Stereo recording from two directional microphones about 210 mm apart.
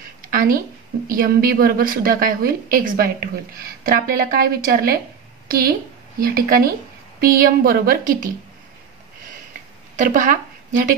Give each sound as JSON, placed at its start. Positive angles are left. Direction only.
{"t": 0.2, "sound": "a woman's voice", "side_deg": -40}
{"t": 9.9, "sound": "speech", "side_deg": -40}